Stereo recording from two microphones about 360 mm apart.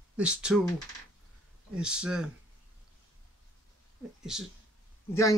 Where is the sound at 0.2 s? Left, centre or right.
Centre.